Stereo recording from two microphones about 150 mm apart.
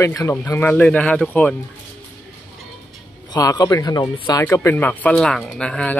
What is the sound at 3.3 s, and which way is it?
A man's voice, 25° left (ahead or behind).